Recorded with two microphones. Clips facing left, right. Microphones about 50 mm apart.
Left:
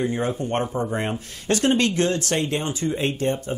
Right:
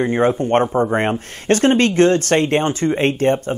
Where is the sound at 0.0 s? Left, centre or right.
Right.